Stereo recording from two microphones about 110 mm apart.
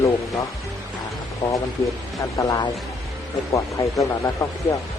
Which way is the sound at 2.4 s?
30° left (ahead or behind).